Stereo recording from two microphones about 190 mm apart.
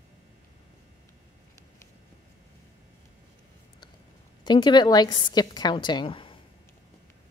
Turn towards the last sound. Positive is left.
turn(degrees=25)  # may be behind; listen again after turning